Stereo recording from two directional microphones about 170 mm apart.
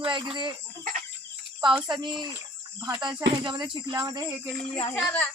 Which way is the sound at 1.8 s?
25° right (ahead or behind).